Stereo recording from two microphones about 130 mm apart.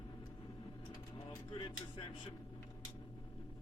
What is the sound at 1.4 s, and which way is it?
Speech, 40° left (ahead or behind).